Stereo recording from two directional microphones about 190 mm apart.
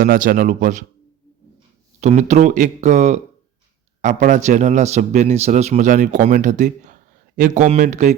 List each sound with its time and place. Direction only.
0.0 s speech: 50° right (ahead or behind)
2.0 s a man's voice: 35° right (ahead or behind)